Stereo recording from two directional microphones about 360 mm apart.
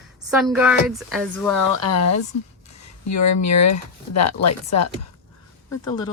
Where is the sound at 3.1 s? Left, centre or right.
Left.